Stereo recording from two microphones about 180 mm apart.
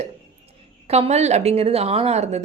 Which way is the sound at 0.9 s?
35° right (ahead or behind).